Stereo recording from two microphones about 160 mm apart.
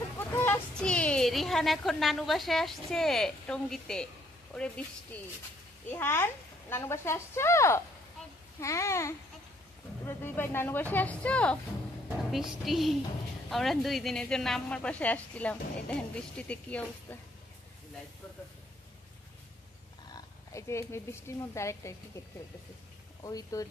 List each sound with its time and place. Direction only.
0.2 s speech: 15° left (ahead or behind)
5.9 s a woman's voice: 15° left (ahead or behind)
20.1 s speech: 20° left (ahead or behind)
23.2 s a child's voice: 20° left (ahead or behind)